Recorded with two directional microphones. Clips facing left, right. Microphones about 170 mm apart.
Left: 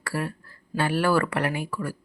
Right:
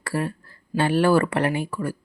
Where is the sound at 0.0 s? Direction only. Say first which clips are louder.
Right 3 dB; 25° right (ahead or behind).